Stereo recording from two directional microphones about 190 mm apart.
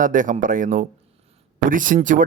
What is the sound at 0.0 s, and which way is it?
Speech, 45° right (ahead or behind).